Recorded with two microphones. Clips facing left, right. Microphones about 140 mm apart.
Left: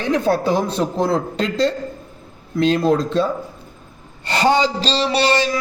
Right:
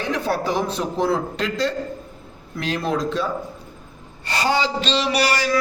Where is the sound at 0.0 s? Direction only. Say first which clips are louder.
Left 5 dB; 20° left (ahead or behind).